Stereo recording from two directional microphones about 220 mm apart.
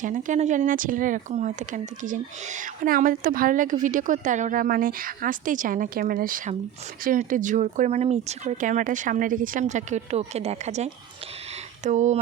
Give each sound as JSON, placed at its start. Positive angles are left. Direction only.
{"t": 0.0, "sound": "speech", "side_deg": -35}